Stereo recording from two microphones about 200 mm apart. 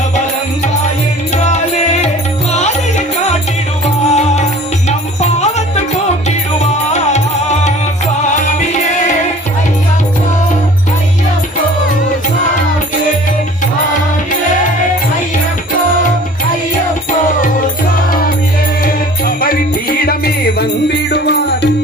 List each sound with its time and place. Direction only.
2.5 s music: 35° left (ahead or behind)
3.8 s music: 35° left (ahead or behind)
6.9 s music: 35° left (ahead or behind)
18.9 s music: 45° left (ahead or behind)